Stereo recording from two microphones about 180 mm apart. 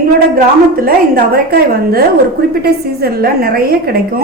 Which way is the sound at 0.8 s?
55° right (ahead or behind).